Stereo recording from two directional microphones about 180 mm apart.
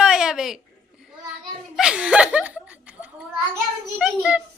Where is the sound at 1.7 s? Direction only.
5° right (ahead or behind).